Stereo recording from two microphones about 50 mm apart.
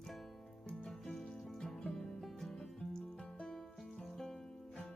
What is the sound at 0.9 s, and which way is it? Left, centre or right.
Music, centre.